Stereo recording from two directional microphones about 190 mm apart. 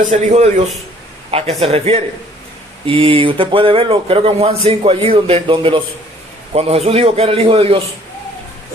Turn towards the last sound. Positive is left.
turn(degrees=-30)  # may be behind; listen again after turning